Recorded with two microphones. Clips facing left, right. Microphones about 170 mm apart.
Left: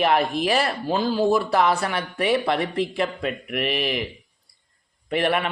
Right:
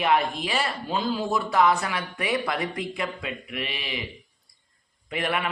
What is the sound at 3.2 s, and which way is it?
Speech, 50° left (ahead or behind).